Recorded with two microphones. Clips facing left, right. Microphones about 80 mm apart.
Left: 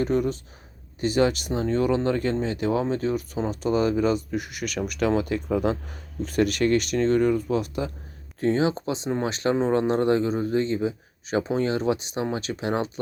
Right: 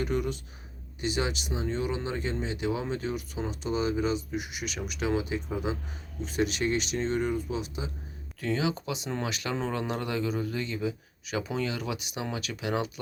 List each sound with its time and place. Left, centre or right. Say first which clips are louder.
0.0 s speech: left 6 dB; left
8.4 s speech: left 7 dB; left